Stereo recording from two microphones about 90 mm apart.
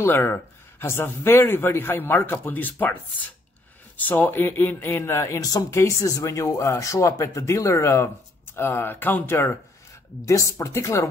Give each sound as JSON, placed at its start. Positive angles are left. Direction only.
{"t": 0.0, "sound": "speech", "side_deg": 25}